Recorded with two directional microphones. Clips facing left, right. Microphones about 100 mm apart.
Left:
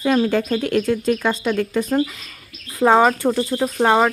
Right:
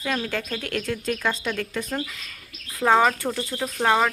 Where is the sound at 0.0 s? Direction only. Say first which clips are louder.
Left 10 dB; 25° left (ahead or behind).